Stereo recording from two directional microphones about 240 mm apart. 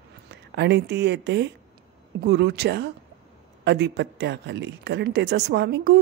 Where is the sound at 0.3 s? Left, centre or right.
Right.